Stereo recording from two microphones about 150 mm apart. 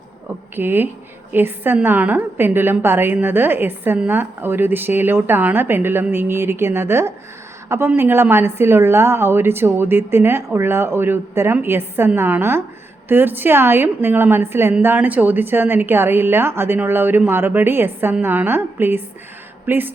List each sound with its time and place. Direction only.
0.5 s a woman's voice: 15° right (ahead or behind)